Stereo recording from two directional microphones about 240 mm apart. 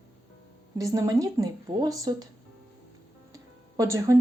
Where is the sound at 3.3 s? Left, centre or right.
Centre.